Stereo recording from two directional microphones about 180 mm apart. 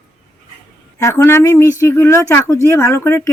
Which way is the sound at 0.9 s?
15° left (ahead or behind).